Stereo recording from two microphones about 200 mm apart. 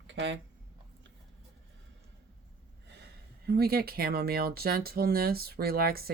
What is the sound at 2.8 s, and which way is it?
Speech, 55° right (ahead or behind).